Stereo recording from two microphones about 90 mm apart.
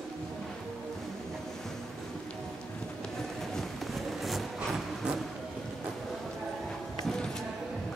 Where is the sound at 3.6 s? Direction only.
Centre (ahead or behind).